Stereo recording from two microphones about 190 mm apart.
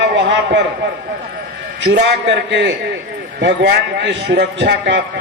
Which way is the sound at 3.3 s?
60° right (ahead or behind).